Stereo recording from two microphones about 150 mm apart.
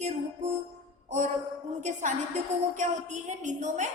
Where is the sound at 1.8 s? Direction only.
55° right (ahead or behind).